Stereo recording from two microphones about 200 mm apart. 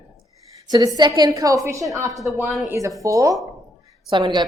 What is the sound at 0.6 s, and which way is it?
A woman's voice, 20° right (ahead or behind).